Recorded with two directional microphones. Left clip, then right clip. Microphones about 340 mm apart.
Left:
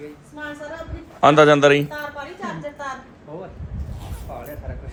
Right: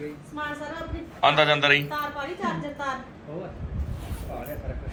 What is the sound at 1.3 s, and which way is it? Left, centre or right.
Speech, left.